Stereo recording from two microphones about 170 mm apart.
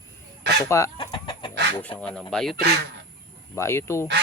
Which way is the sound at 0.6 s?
15° left (ahead or behind).